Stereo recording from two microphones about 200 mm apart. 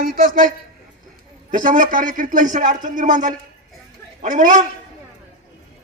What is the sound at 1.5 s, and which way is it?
A man's voice, 40° right (ahead or behind).